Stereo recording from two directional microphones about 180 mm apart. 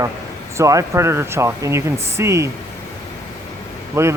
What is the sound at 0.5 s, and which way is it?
Speech, 15° right (ahead or behind).